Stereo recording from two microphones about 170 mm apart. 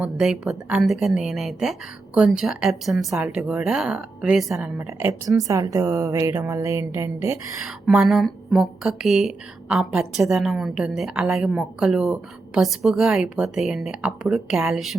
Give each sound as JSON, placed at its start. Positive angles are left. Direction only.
{"t": 0.0, "sound": "speech", "side_deg": 0}
{"t": 4.9, "sound": "a woman's voice", "side_deg": -15}
{"t": 7.9, "sound": "speech", "side_deg": 0}